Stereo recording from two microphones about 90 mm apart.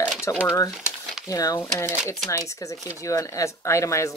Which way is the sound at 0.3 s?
35° left (ahead or behind).